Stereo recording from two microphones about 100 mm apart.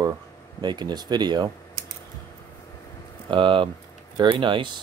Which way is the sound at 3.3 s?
55° right (ahead or behind).